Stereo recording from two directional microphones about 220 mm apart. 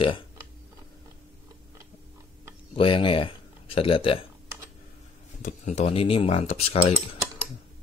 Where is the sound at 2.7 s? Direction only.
25° left (ahead or behind).